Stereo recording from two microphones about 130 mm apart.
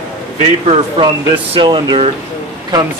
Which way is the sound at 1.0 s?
40° right (ahead or behind).